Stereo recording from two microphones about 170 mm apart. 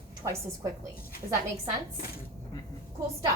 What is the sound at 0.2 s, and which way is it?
Speech, 20° right (ahead or behind).